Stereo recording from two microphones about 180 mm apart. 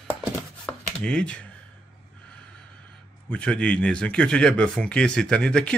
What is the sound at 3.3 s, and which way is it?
Speech, 5° left (ahead or behind).